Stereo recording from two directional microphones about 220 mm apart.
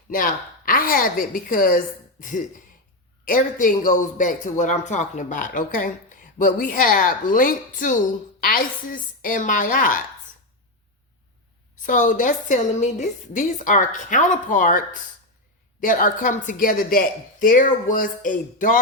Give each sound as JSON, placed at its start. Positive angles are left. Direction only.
{"t": 0.1, "sound": "a woman's voice", "side_deg": 40}
{"t": 11.8, "sound": "a woman's voice", "side_deg": 35}